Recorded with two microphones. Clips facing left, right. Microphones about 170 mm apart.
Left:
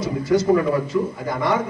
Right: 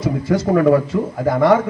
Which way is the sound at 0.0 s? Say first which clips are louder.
Right 1 dB; 55° right (ahead or behind).